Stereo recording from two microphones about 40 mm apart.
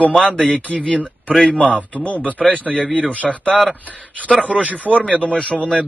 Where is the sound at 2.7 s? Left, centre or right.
Centre.